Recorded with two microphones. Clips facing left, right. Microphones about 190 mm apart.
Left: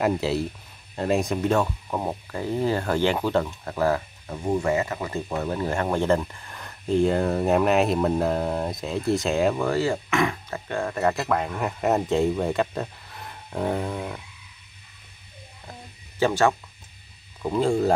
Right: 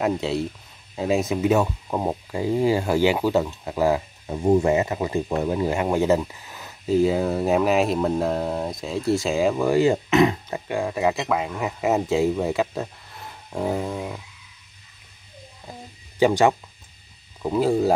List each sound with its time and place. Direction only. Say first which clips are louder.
0.0 s speech: even; centre (ahead or behind)
9.7 s speech: right 5 dB; 15° right (ahead or behind)
16.2 s speech: right 3 dB; 15° right (ahead or behind)